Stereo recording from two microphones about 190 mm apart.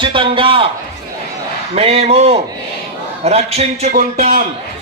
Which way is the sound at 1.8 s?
30° right (ahead or behind).